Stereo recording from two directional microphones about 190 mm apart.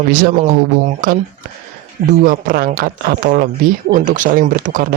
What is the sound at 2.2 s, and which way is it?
Speech, 50° right (ahead or behind).